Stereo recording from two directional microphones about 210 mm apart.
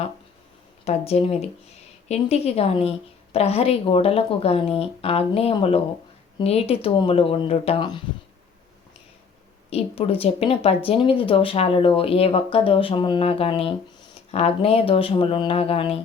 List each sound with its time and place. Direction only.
0.9 s speech: 30° left (ahead or behind)
9.6 s speech: 30° left (ahead or behind)